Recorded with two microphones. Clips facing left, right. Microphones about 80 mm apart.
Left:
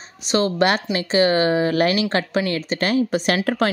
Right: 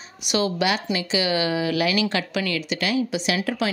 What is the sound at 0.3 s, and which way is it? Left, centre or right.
Speech, left.